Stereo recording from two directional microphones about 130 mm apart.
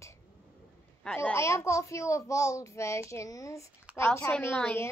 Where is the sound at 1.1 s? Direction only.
20° left (ahead or behind).